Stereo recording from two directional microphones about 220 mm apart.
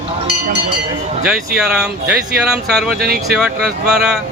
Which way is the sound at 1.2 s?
5° right (ahead or behind).